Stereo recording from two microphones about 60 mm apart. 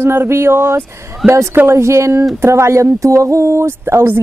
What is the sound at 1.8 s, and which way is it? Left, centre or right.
Speech, right.